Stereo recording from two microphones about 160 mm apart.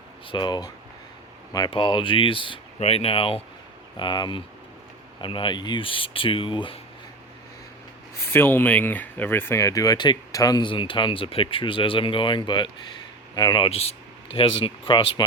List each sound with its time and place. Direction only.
0.3 s speech: 30° left (ahead or behind)
8.3 s speech: 15° left (ahead or behind); by 15.2 s 30° left (ahead or behind)